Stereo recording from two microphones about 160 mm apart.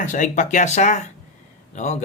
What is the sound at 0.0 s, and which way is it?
Speech, 50° left (ahead or behind).